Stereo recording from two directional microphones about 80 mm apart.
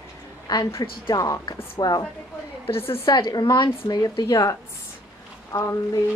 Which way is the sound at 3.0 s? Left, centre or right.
Left.